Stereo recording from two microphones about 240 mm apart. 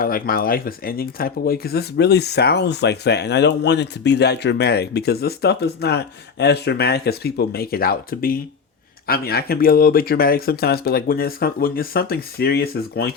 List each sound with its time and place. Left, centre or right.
0.0 s speech: left